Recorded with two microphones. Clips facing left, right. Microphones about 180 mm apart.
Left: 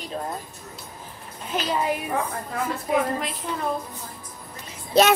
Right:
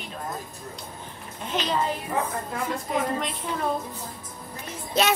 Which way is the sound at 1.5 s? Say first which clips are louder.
Left 2 dB; 5° left (ahead or behind).